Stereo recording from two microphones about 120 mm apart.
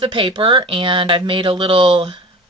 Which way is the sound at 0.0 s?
40° right (ahead or behind).